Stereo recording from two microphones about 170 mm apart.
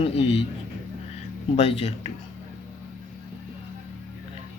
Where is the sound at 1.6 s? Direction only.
35° left (ahead or behind).